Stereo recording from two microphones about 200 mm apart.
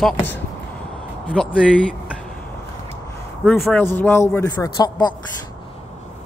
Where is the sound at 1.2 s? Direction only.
5° left (ahead or behind).